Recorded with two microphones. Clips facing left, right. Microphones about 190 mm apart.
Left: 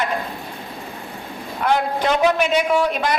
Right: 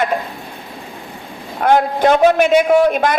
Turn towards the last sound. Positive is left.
turn(degrees=-50)  # may be behind; listen again after turning